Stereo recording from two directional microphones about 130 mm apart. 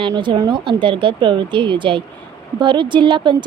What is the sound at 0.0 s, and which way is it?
Speech, 40° right (ahead or behind).